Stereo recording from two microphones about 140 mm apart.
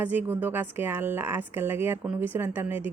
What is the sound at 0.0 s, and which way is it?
Speech, 15° right (ahead or behind).